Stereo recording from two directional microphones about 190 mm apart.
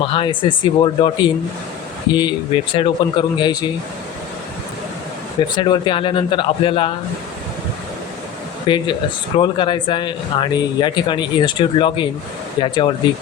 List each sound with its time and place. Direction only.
0.0 s speech: 25° left (ahead or behind)
5.5 s speech: 25° left (ahead or behind)
8.6 s speech: 25° left (ahead or behind)